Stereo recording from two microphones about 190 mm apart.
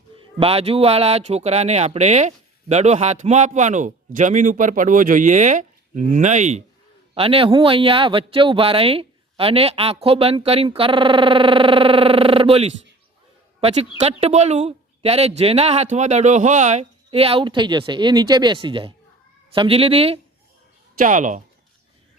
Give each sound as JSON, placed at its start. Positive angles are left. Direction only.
{"t": 0.3, "sound": "speech", "side_deg": -30}
{"t": 14.0, "sound": "speech", "side_deg": -35}
{"t": 21.0, "sound": "speech", "side_deg": -40}